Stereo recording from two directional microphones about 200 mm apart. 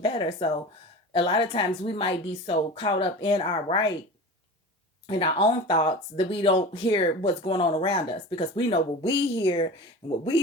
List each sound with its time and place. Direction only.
0.0 s speech: 25° left (ahead or behind)
5.0 s speech: 25° left (ahead or behind)